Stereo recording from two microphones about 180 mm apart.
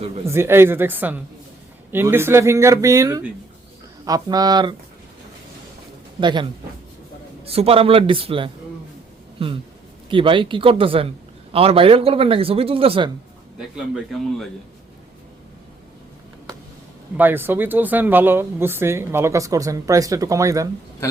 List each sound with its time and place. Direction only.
0.3 s speech: 15° right (ahead or behind)
6.1 s speech: 25° right (ahead or behind)
10.1 s speech: 30° right (ahead or behind)
13.6 s a man's voice: 5° right (ahead or behind)
17.2 s speech: 10° right (ahead or behind)